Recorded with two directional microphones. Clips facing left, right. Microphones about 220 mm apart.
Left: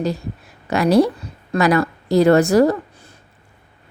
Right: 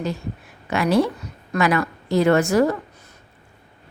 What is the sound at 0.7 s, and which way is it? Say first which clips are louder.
A woman's voice: left 4 dB; 40° left (ahead or behind).